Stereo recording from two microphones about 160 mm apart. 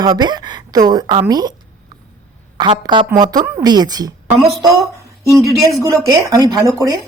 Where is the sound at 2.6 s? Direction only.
30° right (ahead or behind).